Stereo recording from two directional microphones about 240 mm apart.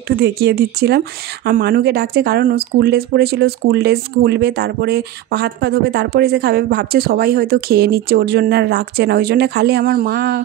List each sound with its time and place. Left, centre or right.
0.1 s speech: right